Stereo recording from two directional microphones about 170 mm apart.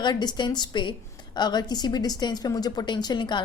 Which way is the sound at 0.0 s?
25° left (ahead or behind).